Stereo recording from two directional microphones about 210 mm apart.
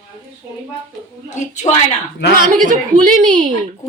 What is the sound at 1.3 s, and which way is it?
Speech, 35° left (ahead or behind).